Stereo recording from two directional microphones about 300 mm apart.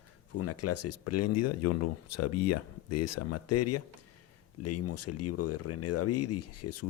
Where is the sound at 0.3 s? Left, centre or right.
Left.